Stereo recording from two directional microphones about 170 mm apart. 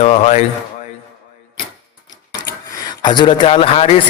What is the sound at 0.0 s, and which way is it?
Speech, 35° left (ahead or behind).